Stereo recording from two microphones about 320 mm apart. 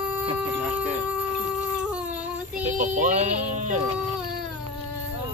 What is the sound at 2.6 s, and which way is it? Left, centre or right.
Music, right.